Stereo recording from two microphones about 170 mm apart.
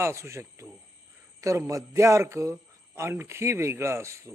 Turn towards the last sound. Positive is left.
turn(degrees=-15)  # may be behind; listen again after turning